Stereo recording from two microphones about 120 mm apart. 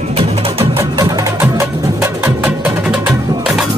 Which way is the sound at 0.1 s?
55° right (ahead or behind).